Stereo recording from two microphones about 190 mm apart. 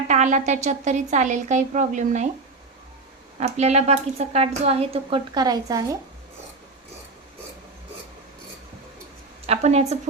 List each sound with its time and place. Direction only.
0.1 s speech: 40° right (ahead or behind)
3.4 s speech: 35° right (ahead or behind); by 6.0 s 20° right (ahead or behind)
9.5 s speech: 35° right (ahead or behind)